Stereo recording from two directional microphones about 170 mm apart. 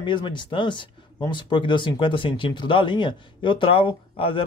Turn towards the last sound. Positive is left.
turn(degrees=30)  # may be behind; listen again after turning